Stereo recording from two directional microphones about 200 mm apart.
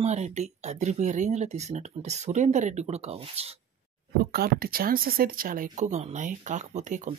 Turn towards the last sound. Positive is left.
turn(degrees=-40)  # may be behind; listen again after turning